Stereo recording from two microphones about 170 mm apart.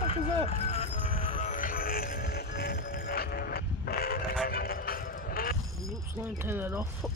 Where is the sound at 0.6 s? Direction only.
40° left (ahead or behind); by 4.2 s 65° left (ahead or behind).